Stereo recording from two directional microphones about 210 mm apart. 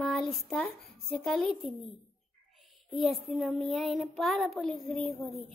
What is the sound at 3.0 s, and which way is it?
A child's voice, centre (ahead or behind).